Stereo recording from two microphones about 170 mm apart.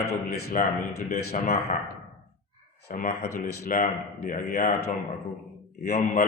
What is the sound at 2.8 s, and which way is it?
Speech, 55° left (ahead or behind).